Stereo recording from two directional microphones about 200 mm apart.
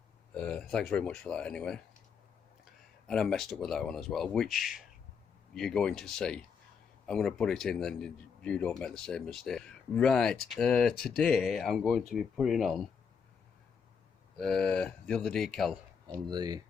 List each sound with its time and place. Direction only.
0.3 s speech: 5° left (ahead or behind)
3.1 s speech: 5° left (ahead or behind)
14.3 s speech: 5° left (ahead or behind)
16.0 s speech: 20° right (ahead or behind)